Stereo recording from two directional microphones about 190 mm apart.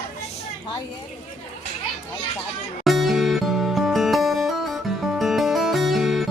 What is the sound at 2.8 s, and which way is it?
Music, centre (ahead or behind).